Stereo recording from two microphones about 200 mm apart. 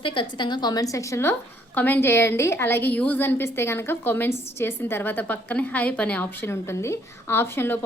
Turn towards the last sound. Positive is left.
turn(degrees=10)  # may be behind; listen again after turning